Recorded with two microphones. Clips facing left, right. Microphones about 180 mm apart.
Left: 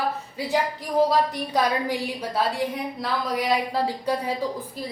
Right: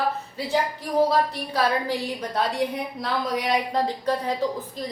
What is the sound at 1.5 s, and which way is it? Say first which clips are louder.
A woman's voice: even; 15° left (ahead or behind).